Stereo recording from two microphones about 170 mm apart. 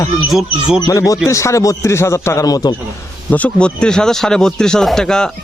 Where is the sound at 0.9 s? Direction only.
20° left (ahead or behind).